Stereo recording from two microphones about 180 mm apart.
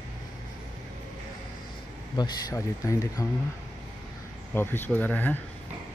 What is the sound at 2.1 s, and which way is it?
Speech, 20° left (ahead or behind).